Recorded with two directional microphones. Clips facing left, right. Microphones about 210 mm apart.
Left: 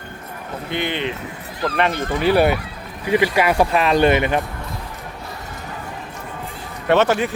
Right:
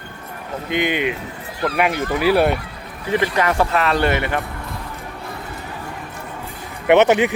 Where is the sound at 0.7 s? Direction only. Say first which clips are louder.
Right 4 dB; 15° right (ahead or behind); by 2.6 s centre (ahead or behind).